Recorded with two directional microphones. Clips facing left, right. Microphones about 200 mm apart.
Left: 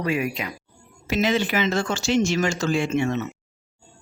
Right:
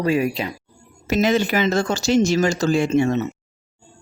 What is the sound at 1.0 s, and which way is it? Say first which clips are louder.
Speech: right 4 dB; 45° right (ahead or behind).